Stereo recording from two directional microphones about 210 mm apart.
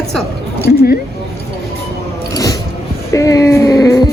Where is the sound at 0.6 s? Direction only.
45° left (ahead or behind).